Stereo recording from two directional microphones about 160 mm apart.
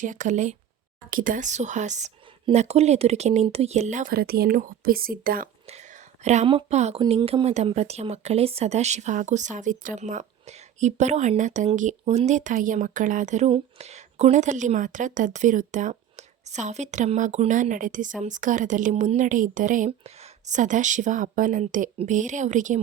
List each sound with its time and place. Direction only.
0.0 s speech: 50° right (ahead or behind)
4.1 s speech: 75° right (ahead or behind)
6.2 s speech: 45° right (ahead or behind)